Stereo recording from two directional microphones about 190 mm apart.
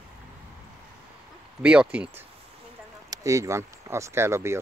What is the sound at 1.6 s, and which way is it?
Speech, 5° right (ahead or behind).